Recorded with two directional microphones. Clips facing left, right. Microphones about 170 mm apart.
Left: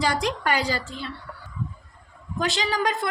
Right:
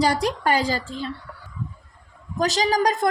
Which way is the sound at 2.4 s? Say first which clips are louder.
Right 4 dB; 40° right (ahead or behind).